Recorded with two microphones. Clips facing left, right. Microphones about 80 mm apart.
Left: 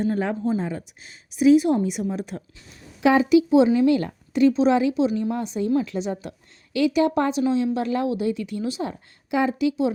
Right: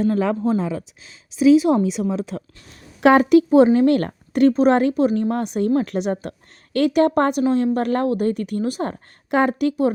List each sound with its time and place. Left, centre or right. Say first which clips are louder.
0.1 s a woman's voice: right 4 dB; right
2.6 s a woman's voice: right 4 dB; right